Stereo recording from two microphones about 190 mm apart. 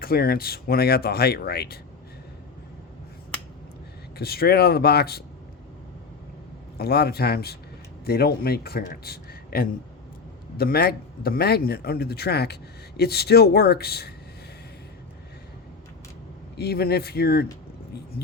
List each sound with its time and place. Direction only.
0.0 s speech: 50° left (ahead or behind)
4.2 s speech: 55° left (ahead or behind)
6.7 s a man's voice: 55° left (ahead or behind)
16.6 s speech: 55° left (ahead or behind)